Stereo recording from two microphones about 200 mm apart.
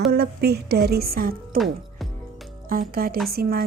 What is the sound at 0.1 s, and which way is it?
A woman's voice, 55° right (ahead or behind).